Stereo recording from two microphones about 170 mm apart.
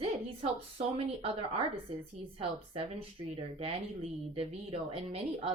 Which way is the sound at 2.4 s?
30° right (ahead or behind).